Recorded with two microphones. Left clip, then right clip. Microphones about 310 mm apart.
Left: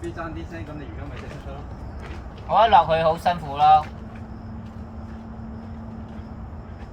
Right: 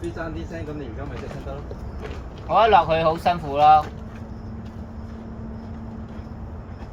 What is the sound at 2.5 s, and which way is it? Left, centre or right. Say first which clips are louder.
Speech: even; centre.